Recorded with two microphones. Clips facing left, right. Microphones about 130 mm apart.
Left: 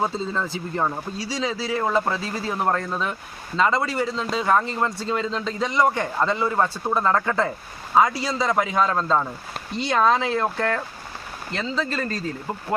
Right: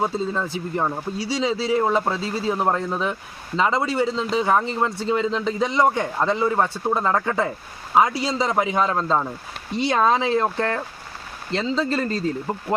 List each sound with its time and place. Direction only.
0.0 s a man's voice: 10° right (ahead or behind)
11.9 s speech: 25° right (ahead or behind)